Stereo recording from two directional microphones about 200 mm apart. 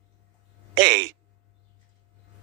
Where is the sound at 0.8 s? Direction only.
60° right (ahead or behind).